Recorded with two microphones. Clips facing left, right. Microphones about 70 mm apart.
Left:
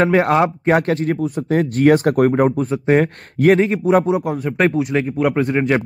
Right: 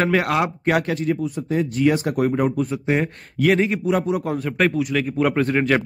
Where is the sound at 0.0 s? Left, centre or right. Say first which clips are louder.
Left 5 dB; left.